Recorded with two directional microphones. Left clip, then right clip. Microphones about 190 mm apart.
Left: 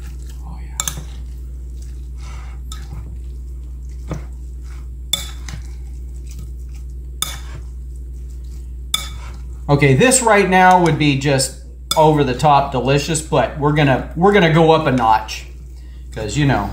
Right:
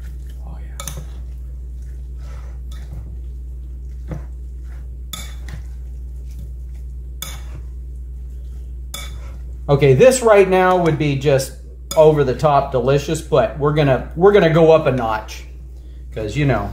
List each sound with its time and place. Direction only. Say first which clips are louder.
9.7 s speech: right 2 dB; 35° right (ahead or behind)